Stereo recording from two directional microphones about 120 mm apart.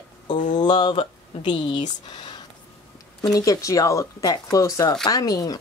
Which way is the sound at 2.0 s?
40° left (ahead or behind).